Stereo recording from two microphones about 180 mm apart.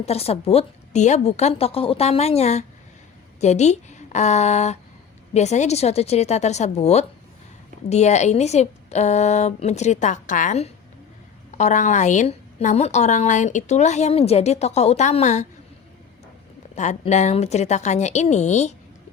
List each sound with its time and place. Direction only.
0.0 s a woman's voice: 35° left (ahead or behind)
16.7 s a woman's voice: 40° left (ahead or behind)